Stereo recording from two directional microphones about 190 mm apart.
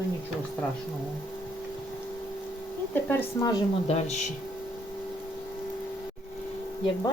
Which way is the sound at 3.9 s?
35° left (ahead or behind).